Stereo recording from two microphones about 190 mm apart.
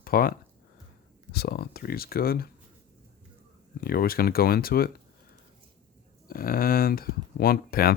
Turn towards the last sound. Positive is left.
turn(degrees=50)  # may be behind; listen again after turning